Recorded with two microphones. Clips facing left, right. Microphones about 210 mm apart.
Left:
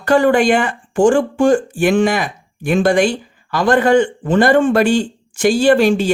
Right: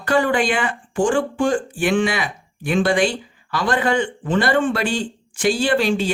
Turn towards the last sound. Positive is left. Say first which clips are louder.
# left 7 dB
turn(degrees=45)  # may be behind; listen again after turning